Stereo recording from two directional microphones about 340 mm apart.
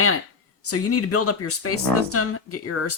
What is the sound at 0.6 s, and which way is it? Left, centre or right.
Speech, left.